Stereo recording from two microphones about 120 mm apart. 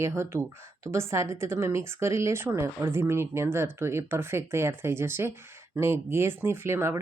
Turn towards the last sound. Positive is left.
turn(degrees=-20)  # may be behind; listen again after turning